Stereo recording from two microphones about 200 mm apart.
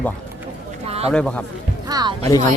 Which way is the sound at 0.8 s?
30° right (ahead or behind).